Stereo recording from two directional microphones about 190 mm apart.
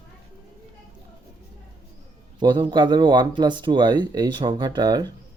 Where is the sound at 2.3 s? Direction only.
25° right (ahead or behind).